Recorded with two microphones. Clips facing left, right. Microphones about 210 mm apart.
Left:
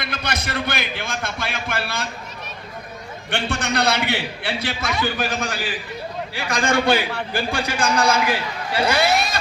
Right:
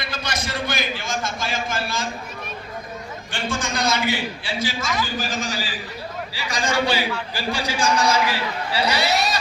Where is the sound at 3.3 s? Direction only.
65° left (ahead or behind).